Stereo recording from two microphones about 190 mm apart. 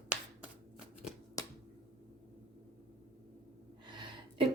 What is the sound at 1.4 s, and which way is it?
Finger snapping, 15° left (ahead or behind).